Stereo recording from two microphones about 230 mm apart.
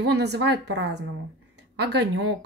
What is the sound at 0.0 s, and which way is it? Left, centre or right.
A woman's voice, right.